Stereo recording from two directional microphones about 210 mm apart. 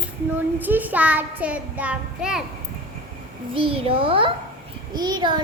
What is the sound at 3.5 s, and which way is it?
A child's voice, 25° right (ahead or behind).